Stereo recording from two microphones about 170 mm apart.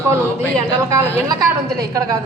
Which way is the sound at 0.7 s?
15° right (ahead or behind).